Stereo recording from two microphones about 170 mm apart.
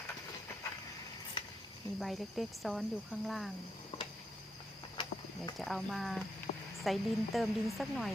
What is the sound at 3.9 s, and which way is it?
Tick-tock, 35° left (ahead or behind).